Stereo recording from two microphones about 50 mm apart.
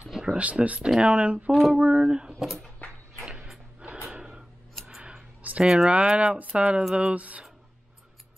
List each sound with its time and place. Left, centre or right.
0.1 s a sound: centre
0.4 s speech: right
0.8 s speech: centre
1.1 s speech: right
1.5 s speech: centre
1.8 s speech: centre
2.3 s speech: centre
4.1 s a sound: centre
5.6 s speech: centre
5.9 s speech: right